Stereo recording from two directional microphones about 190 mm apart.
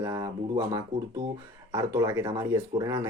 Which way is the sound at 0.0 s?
15° right (ahead or behind).